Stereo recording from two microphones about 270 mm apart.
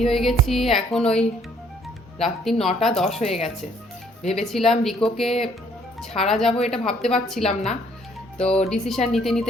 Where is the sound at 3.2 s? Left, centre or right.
Left.